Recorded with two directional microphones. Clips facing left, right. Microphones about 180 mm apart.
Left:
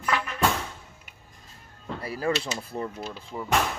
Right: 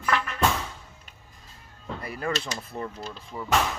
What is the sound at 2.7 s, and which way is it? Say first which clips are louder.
Speech: left 2 dB; 5° left (ahead or behind).